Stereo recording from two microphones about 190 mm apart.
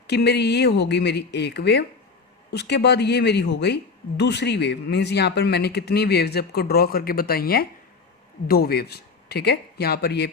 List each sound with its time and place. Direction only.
0.1 s speech: 60° left (ahead or behind)